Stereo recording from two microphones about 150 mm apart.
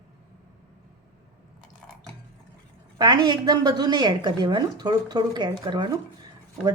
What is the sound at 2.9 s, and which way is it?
A woman's voice, 30° right (ahead or behind).